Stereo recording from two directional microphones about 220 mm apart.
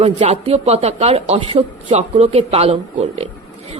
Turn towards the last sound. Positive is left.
turn(degrees=-25)  # may be behind; listen again after turning